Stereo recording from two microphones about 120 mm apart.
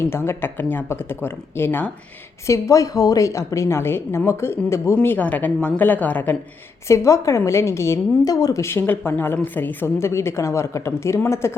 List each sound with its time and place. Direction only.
0.0 s speech: 20° left (ahead or behind)
6.8 s speech: 25° left (ahead or behind)